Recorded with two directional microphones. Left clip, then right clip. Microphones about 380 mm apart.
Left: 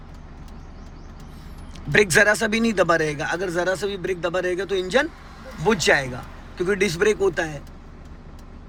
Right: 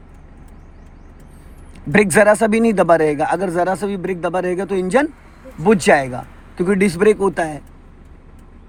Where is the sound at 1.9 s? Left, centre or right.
Centre.